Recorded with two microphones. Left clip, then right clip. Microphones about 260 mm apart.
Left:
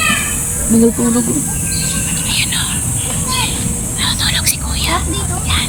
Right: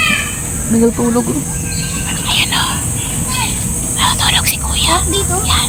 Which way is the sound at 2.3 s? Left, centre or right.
Centre.